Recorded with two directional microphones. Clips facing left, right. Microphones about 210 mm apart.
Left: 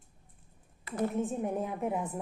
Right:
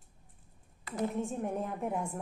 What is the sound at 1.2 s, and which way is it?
A woman's voice, centre (ahead or behind).